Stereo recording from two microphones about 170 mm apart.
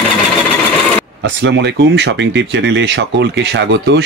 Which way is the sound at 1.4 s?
90° right.